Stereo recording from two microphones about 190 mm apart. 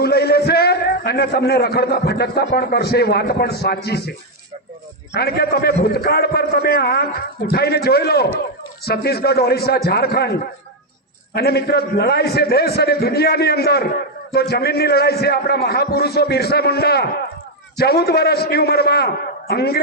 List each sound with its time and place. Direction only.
0.0 s a man's voice: 55° left (ahead or behind)
5.1 s a man's voice: 55° left (ahead or behind)
11.3 s a man's voice: 55° left (ahead or behind)